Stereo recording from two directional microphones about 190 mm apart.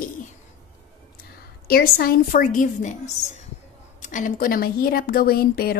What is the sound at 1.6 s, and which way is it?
A woman's voice, 50° left (ahead or behind).